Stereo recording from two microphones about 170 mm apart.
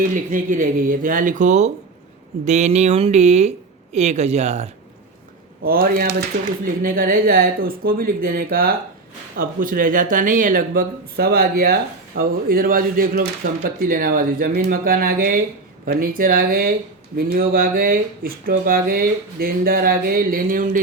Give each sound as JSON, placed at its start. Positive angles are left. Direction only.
{"t": 0.0, "sound": "speech", "side_deg": -50}
{"t": 2.4, "sound": "a sound", "side_deg": -45}
{"t": 5.6, "sound": "speech", "side_deg": -60}